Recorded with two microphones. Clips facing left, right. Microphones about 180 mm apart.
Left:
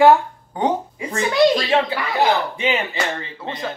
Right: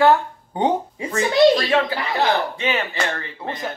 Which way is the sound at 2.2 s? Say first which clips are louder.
Left 2 dB; 15° left (ahead or behind).